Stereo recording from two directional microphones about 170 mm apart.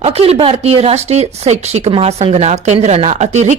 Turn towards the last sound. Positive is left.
turn(degrees=-40)  # may be behind; listen again after turning